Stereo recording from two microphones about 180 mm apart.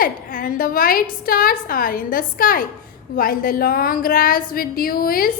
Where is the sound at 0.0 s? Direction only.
50° left (ahead or behind).